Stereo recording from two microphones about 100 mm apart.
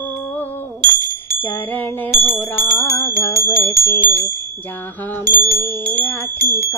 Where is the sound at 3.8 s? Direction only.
20° left (ahead or behind).